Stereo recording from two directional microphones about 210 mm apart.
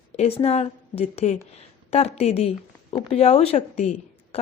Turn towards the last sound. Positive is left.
turn(degrees=30)  # may be behind; listen again after turning